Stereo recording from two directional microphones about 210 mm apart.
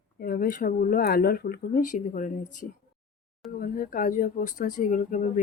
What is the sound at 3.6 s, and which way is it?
Speech, 40° left (ahead or behind).